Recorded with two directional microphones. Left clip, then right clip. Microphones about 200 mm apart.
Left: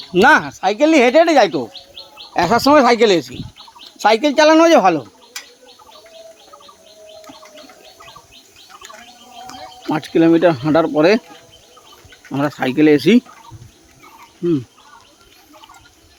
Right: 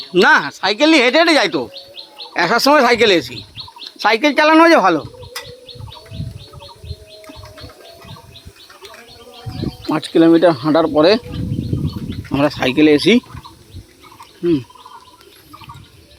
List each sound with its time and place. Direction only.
0.1 s speech: 15° left (ahead or behind)
9.9 s speech: 15° left (ahead or behind)
12.3 s speech: centre (ahead or behind)